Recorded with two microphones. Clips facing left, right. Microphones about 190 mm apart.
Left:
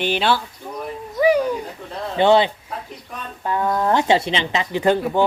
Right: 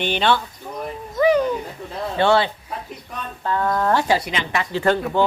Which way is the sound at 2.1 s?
20° left (ahead or behind).